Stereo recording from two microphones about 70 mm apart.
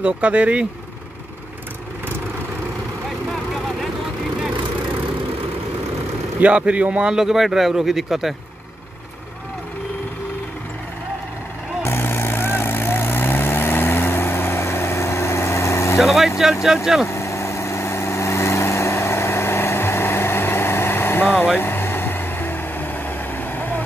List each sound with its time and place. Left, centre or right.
0.0 s a man's voice: centre
6.4 s a man's voice: centre
11.8 s vehicle: left
16.0 s speech: centre
17.1 s vehicle: left